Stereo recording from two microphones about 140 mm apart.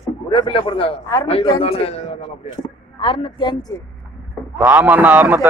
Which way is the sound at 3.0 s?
35° left (ahead or behind).